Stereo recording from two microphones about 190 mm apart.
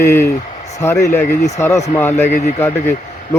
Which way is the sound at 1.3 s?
35° left (ahead or behind).